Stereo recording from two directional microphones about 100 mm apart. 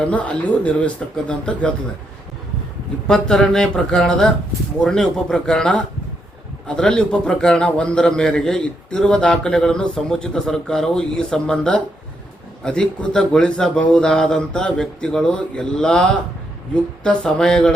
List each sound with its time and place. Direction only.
0.1 s a man's voice: 15° left (ahead or behind)
3.1 s a man's voice: 5° left (ahead or behind)